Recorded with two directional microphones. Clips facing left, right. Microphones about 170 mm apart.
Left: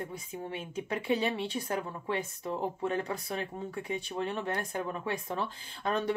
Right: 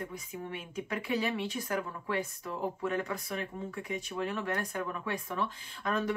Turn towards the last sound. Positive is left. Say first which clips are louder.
# left 1 dB
turn(degrees=30)  # may be behind; listen again after turning